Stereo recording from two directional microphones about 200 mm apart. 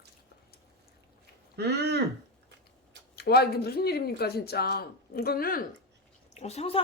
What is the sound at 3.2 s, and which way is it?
Speech, 55° left (ahead or behind).